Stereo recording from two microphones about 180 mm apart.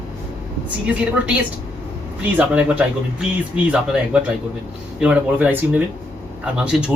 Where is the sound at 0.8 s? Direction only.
5° right (ahead or behind).